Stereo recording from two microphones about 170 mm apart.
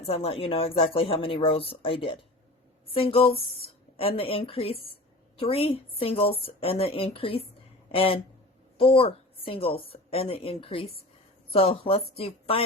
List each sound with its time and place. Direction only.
0.0 s speech: 35° left (ahead or behind)